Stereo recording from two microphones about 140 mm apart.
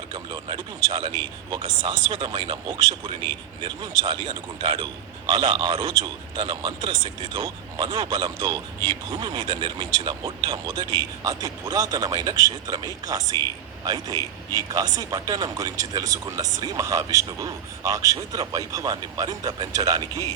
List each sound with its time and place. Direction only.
0.1 s speech: 35° right (ahead or behind)